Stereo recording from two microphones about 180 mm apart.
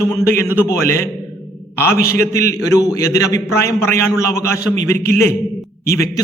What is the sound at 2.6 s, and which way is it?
A man's voice, 20° left (ahead or behind).